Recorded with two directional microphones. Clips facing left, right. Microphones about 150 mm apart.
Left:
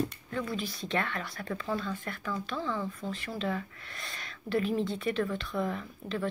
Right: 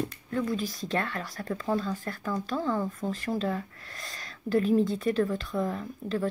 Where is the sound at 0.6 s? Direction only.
40° right (ahead or behind).